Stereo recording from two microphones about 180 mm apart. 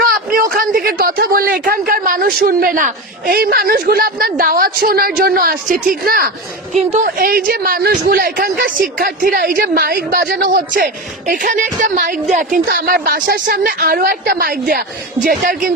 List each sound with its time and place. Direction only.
0.0 s a sound: 55° right (ahead or behind)
2.4 s speech: 50° right (ahead or behind)
6.7 s a woman's voice: 40° right (ahead or behind)
7.2 s speech: 55° right (ahead or behind)
12.6 s speech: 60° right (ahead or behind)